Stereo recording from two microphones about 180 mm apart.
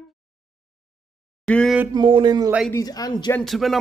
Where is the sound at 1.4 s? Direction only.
5° left (ahead or behind).